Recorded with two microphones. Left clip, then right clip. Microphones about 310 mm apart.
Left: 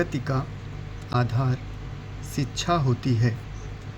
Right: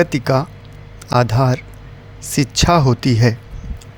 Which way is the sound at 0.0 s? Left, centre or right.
Right.